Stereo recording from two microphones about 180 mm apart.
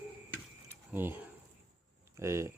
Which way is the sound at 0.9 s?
10° right (ahead or behind).